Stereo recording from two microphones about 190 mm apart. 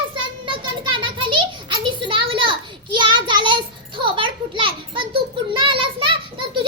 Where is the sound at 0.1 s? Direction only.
25° right (ahead or behind).